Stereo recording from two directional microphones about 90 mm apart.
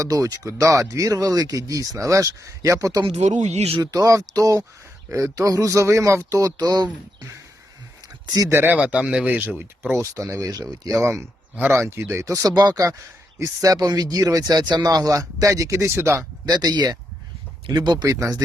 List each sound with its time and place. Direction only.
0.0 s speech: 40° right (ahead or behind)
8.4 s speech: 25° right (ahead or behind)
12.3 s speech: 45° right (ahead or behind); by 16.2 s 30° right (ahead or behind)
16.5 s speech: 45° right (ahead or behind)